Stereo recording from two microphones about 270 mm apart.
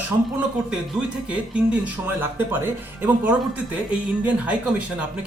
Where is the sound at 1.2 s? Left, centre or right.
Centre.